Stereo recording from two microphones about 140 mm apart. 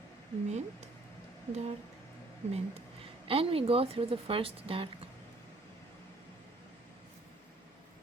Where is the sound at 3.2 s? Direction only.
40° right (ahead or behind).